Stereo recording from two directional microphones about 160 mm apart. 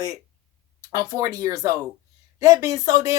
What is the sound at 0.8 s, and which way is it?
Speech, 25° right (ahead or behind).